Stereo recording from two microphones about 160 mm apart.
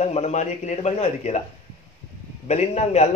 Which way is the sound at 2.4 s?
45° left (ahead or behind).